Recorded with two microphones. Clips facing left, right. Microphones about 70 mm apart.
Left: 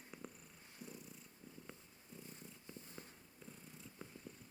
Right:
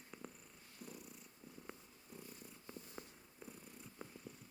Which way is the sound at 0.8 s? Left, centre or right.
Centre.